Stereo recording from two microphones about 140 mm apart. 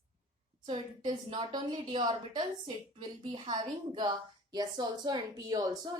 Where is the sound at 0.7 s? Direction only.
35° right (ahead or behind).